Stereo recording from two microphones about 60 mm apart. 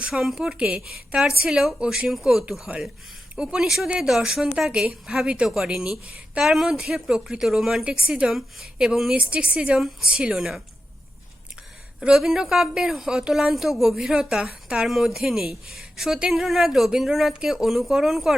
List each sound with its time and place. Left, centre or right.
0.1 s a woman's voice: centre
9.1 s speech: right
9.7 s speech: centre
11.9 s a woman's voice: centre